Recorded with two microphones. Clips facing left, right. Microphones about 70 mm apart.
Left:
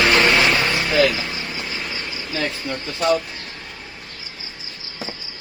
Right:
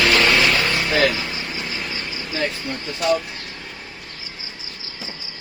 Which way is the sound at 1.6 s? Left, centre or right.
Centre.